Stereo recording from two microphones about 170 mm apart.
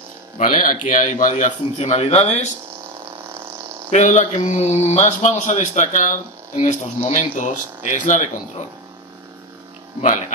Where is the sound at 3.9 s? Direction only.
45° left (ahead or behind).